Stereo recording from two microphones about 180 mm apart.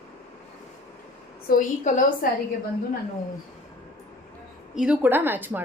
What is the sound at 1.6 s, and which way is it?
Speech, 45° left (ahead or behind).